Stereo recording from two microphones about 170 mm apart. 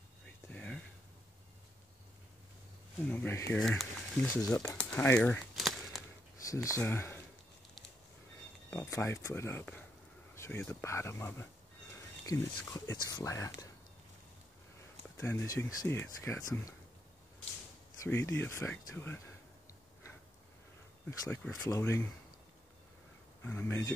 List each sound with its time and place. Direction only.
0.5 s a sound: 10° left (ahead or behind)
3.0 s speech: 10° left (ahead or behind)
4.4 s speech: 20° left (ahead or behind)
4.7 s speech: 10° left (ahead or behind)
5.6 s a sound: centre (ahead or behind)
6.4 s speech: 20° left (ahead or behind)
8.6 s speech: 15° left (ahead or behind)
15.1 s speech: 15° left (ahead or behind)
18.0 s speech: 15° left (ahead or behind)
21.2 s speech: 20° left (ahead or behind)
23.4 s speech: 15° left (ahead or behind)